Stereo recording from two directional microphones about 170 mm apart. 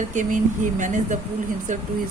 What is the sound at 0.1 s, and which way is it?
Speech, 45° right (ahead or behind).